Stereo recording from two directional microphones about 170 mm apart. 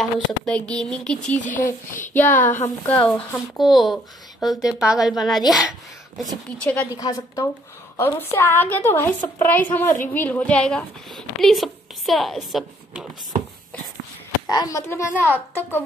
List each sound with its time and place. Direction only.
0.0 s a woman's voice: 5° left (ahead or behind)
1.4 s speech: 50° left (ahead or behind)
1.7 s a woman's voice: 10° left (ahead or behind)
6.9 s a woman's voice: 20° left (ahead or behind); by 13.1 s centre (ahead or behind)
14.5 s a woman's voice: 20° left (ahead or behind)